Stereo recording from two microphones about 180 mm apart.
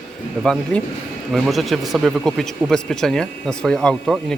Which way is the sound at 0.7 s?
5° left (ahead or behind).